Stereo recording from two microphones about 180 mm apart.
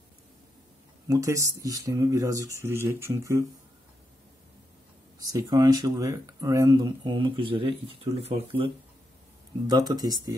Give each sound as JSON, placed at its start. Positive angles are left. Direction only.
{"t": 1.0, "sound": "speech", "side_deg": -20}
{"t": 5.3, "sound": "speech", "side_deg": -20}
{"t": 9.7, "sound": "speech", "side_deg": -20}